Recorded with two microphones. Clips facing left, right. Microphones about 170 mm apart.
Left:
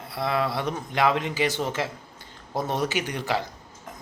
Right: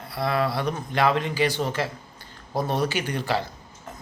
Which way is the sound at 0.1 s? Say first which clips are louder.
Right 1 dB; 20° left (ahead or behind).